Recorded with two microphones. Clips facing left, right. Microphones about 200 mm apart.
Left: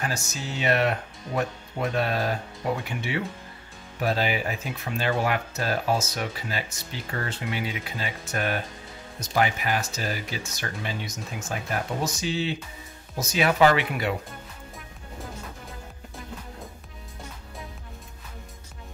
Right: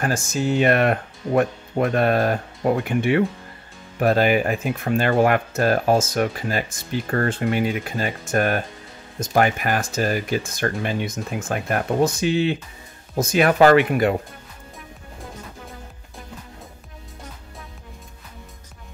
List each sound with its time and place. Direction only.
0.0 s speech: 50° right (ahead or behind)